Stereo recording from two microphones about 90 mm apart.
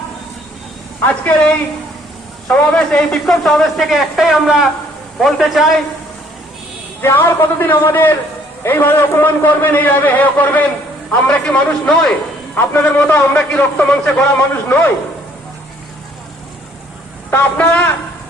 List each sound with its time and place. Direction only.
2.5 s a man's voice: 15° left (ahead or behind)
7.0 s a man's voice: 25° left (ahead or behind); by 12.1 s 10° left (ahead or behind)
12.5 s a man's voice: 20° left (ahead or behind)
17.3 s a man's voice: 20° left (ahead or behind)